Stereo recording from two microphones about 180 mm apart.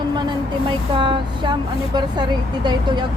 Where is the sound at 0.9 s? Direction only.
25° right (ahead or behind).